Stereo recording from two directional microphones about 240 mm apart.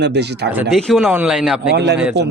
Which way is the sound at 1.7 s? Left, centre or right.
Right.